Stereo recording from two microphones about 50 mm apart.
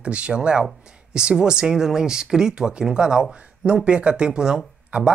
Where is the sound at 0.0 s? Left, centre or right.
Right.